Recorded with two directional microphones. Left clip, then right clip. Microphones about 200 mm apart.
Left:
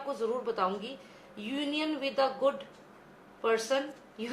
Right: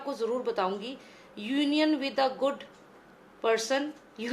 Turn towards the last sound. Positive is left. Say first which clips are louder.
# right 2 dB
turn(degrees=-35)  # may be behind; listen again after turning